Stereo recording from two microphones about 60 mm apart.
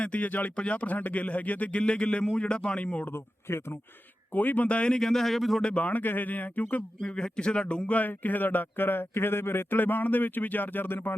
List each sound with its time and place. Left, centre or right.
0.0 s speech: left
3.1 s speech: left
4.3 s speech: left; by 5.6 s centre
5.6 s speech: left